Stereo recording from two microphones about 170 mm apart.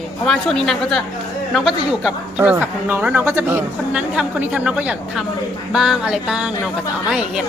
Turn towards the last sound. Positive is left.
turn(degrees=-5)  # may be behind; listen again after turning